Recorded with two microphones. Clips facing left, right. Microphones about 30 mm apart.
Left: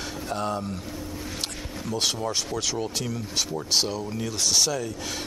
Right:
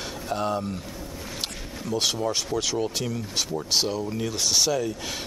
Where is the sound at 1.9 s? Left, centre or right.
Centre.